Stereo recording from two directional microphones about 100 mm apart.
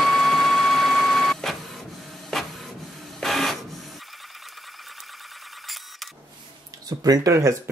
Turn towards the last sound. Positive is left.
turn(degrees=-30)  # may be behind; listen again after turning